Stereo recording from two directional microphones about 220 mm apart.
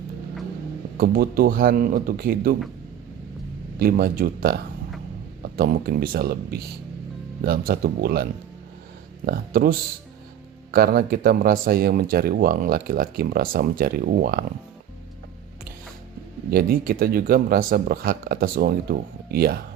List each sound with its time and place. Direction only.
0.9 s speech: 40° right (ahead or behind)
3.8 s speech: 40° right (ahead or behind)
16.5 s speech: 45° right (ahead or behind)